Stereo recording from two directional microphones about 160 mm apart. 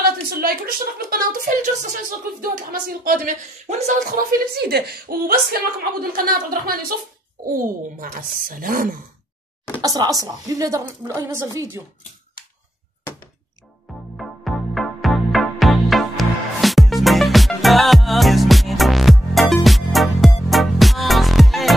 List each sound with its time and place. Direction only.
0.4 s speech: 70° right (ahead or behind); by 2.0 s 50° right (ahead or behind)
2.3 s speech: 65° right (ahead or behind)
7.5 s speech: 60° right (ahead or behind)
9.8 s a woman's voice: 25° right (ahead or behind)
14.1 s music: centre (ahead or behind)